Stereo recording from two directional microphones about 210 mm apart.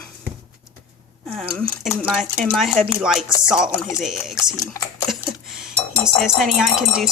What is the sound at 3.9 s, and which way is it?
Speech, centre (ahead or behind).